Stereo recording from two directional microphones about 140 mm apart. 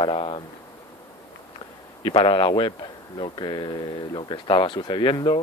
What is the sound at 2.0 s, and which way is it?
Speech, 35° left (ahead or behind).